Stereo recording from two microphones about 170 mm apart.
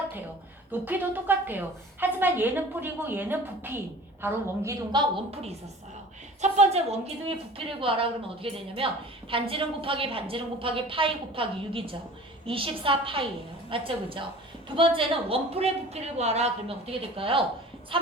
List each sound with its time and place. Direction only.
0.7 s a woman's voice: 10° right (ahead or behind)
4.9 s a woman's voice: 30° right (ahead or behind)